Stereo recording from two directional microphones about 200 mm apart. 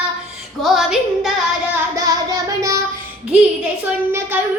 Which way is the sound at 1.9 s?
15° right (ahead or behind).